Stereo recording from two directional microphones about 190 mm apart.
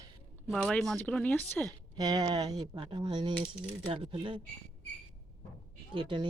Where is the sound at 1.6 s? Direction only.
20° right (ahead or behind).